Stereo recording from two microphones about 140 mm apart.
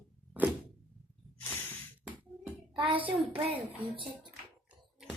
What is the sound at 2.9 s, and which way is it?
Speech, 40° right (ahead or behind).